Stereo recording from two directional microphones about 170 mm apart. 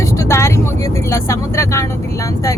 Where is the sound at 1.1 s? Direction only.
15° left (ahead or behind).